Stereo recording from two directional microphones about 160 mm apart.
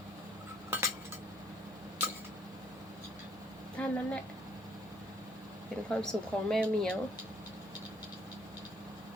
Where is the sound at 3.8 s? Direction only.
5° left (ahead or behind).